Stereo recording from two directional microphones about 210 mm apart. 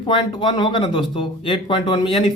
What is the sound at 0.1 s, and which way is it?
Speech, 20° left (ahead or behind).